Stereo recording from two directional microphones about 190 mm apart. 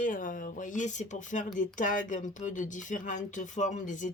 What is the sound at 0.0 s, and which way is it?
Speech, 45° left (ahead or behind).